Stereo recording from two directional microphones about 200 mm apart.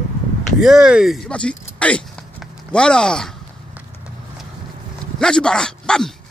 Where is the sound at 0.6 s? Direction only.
Centre (ahead or behind).